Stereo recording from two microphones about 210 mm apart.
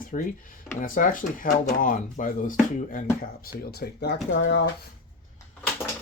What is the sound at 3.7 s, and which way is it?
Speech, 50° left (ahead or behind).